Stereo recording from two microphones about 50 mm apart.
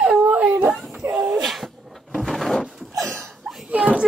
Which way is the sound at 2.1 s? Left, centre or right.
Centre.